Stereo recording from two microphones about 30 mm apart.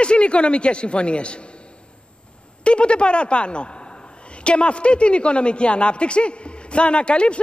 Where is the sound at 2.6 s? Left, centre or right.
Left.